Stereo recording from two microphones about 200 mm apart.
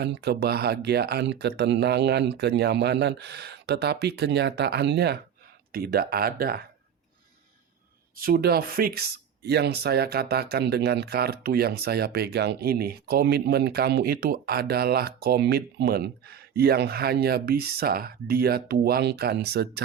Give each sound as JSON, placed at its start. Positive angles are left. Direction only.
{"t": 0.0, "sound": "speech", "side_deg": -55}
{"t": 8.1, "sound": "speech", "side_deg": -45}